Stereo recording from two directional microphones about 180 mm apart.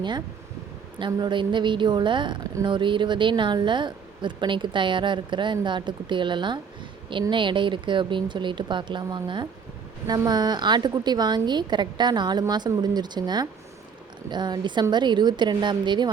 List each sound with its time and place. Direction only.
0.9 s a woman's voice: 25° right (ahead or behind)